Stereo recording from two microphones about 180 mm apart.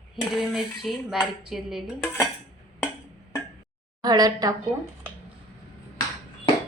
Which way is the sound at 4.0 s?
20° right (ahead or behind).